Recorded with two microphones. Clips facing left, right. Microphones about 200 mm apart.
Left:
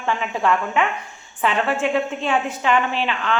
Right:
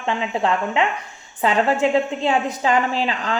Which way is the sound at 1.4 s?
40° right (ahead or behind).